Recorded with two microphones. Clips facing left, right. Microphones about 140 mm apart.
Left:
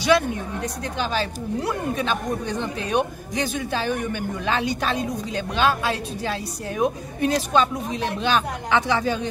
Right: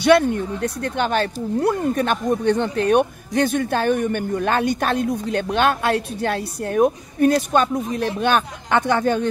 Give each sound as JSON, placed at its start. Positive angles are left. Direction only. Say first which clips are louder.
{"t": 0.0, "sound": "speech", "louder": "right 5 dB", "side_deg": -60}